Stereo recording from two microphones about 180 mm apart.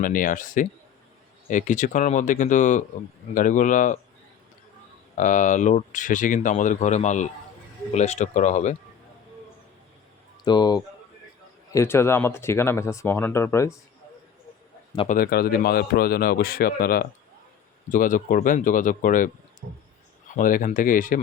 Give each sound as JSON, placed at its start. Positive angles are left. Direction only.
{"t": 0.0, "sound": "speech", "side_deg": 50}
{"t": 5.1, "sound": "speech", "side_deg": 45}
{"t": 10.4, "sound": "speech", "side_deg": 25}
{"t": 15.0, "sound": "a man's voice", "side_deg": 50}